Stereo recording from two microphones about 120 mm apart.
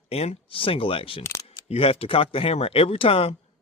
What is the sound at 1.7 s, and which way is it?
Speech, 55° left (ahead or behind).